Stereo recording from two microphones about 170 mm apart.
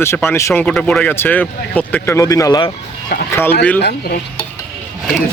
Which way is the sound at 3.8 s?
65° left (ahead or behind).